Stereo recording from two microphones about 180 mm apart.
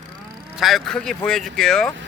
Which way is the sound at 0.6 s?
Centre (ahead or behind).